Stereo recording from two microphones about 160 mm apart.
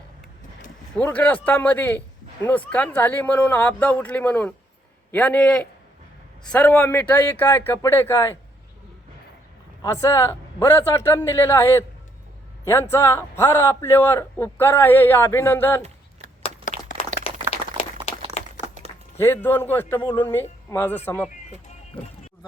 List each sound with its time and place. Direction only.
0.9 s a man's voice: 10° left (ahead or behind)
9.8 s a man's voice: 20° left (ahead or behind)
16.4 s a sound: 40° left (ahead or behind)
19.1 s a man's voice: 15° left (ahead or behind)